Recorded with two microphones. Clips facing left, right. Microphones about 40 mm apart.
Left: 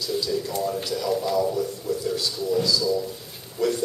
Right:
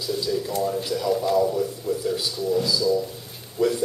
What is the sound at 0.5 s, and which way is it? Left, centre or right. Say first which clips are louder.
A man's voice: right 2 dB; centre.